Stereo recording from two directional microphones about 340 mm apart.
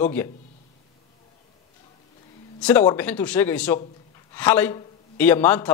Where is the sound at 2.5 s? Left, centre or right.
Centre.